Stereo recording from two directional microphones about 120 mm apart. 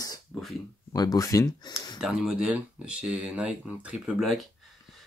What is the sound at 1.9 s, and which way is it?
Speech, 5° right (ahead or behind).